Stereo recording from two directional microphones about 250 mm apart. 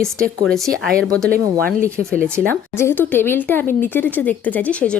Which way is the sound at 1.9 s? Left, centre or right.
Centre.